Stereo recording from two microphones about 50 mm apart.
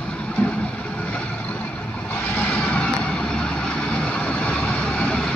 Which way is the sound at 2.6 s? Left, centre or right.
Left.